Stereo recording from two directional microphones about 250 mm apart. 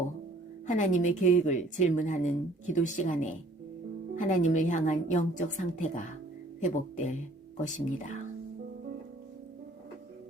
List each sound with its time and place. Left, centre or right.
0.7 s a woman's voice: left